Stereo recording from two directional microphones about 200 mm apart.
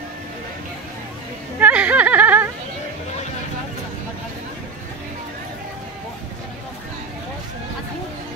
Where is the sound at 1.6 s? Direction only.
5° right (ahead or behind).